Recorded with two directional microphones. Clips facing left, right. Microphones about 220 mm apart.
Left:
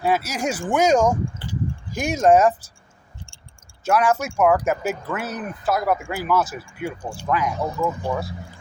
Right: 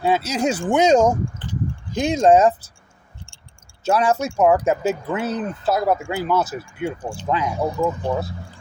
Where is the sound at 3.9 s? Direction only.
25° right (ahead or behind).